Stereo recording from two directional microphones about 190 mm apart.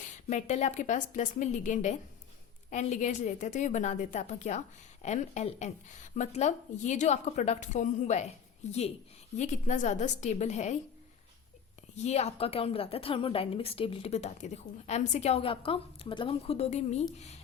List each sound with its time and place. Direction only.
0.0 s a woman's voice: 40° left (ahead or behind)
11.9 s a woman's voice: 35° left (ahead or behind)